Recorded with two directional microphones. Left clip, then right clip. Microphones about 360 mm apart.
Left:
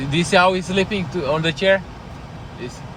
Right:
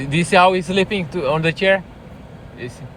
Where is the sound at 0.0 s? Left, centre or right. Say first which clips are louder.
Right 2 dB; centre.